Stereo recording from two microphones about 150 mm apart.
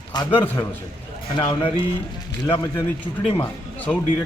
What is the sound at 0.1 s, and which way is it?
Speech, 30° left (ahead or behind).